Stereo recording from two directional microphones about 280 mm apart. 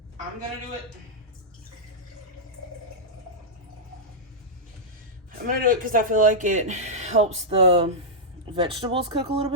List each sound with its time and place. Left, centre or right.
5.5 s speech: right